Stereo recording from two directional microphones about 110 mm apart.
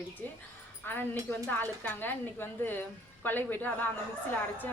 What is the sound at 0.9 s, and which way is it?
A woman's voice, 20° left (ahead or behind).